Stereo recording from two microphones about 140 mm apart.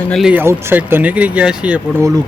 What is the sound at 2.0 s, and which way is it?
Speech, 25° right (ahead or behind).